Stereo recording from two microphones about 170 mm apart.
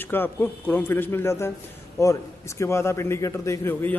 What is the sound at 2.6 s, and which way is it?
A man's voice, 15° left (ahead or behind).